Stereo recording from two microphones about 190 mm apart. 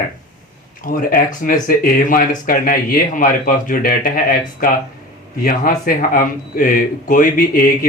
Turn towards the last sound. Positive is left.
turn(degrees=45)  # may be behind; listen again after turning